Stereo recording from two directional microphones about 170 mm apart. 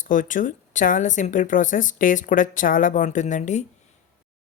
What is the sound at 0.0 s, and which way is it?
A woman's voice, 50° left (ahead or behind).